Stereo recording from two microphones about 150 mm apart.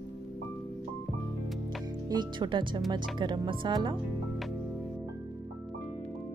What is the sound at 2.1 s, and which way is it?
Speech, 30° right (ahead or behind).